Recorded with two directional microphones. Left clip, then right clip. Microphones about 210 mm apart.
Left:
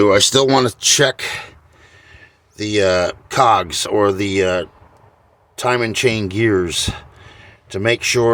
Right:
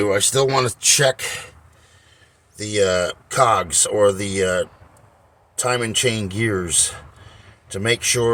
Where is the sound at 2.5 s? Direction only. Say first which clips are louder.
Left 3 dB; 30° left (ahead or behind).